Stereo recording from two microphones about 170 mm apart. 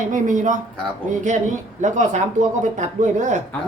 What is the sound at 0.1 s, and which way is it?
Speech, 50° right (ahead or behind).